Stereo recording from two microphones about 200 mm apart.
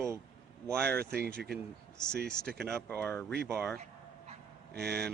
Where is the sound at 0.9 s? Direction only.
50° right (ahead or behind).